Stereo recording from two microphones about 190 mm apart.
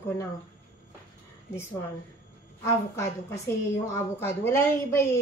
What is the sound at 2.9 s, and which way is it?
A woman's voice, 15° left (ahead or behind).